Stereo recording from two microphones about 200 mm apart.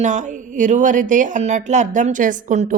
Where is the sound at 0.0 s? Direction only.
40° right (ahead or behind).